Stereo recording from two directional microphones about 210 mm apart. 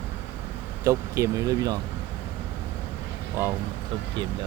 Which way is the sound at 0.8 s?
15° right (ahead or behind).